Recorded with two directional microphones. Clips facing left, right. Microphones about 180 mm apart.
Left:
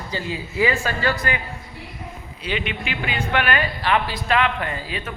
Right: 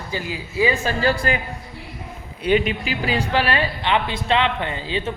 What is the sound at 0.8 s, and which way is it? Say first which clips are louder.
Speech: right 3 dB; 30° right (ahead or behind).